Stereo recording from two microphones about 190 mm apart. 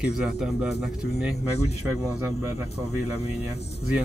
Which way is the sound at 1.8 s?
15° right (ahead or behind).